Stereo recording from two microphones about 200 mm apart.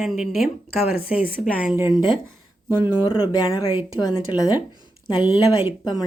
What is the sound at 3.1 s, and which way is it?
Speech, 20° left (ahead or behind).